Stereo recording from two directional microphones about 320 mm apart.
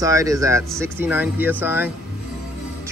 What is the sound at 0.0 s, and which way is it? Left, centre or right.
Speech, centre.